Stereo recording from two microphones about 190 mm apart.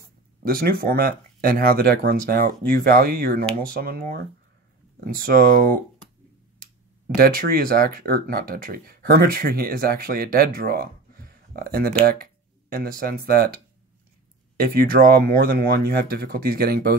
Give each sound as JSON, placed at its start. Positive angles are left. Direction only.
{"t": 0.4, "sound": "speech", "side_deg": -50}
{"t": 7.2, "sound": "speech", "side_deg": -50}
{"t": 14.6, "sound": "speech", "side_deg": -50}